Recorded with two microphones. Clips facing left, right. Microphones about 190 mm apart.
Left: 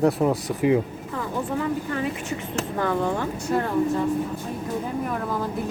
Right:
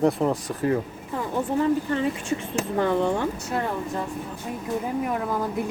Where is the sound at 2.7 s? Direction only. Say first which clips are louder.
Right 2 dB; 20° right (ahead or behind).